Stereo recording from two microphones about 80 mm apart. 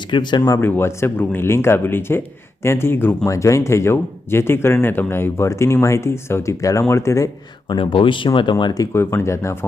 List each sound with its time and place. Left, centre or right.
0.1 s speech: left
0.6 s speech: left
3.2 s speech: left
7.7 s speech: left
8.9 s speech: left